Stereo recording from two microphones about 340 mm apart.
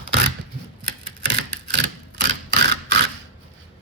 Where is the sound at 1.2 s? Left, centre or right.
Right.